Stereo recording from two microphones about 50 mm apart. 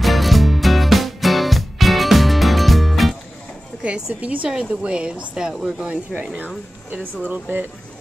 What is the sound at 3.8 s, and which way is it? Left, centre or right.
Speech, centre.